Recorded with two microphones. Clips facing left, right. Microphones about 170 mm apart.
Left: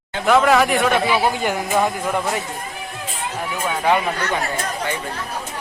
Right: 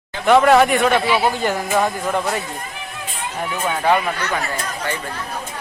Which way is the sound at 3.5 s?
10° left (ahead or behind).